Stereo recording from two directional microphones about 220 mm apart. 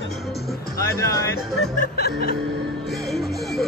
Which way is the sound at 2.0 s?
45° left (ahead or behind).